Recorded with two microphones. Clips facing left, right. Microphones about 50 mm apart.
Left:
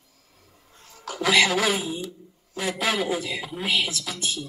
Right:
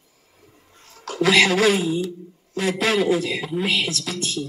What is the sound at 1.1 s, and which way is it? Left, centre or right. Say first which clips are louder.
A man's voice: right 4 dB; right.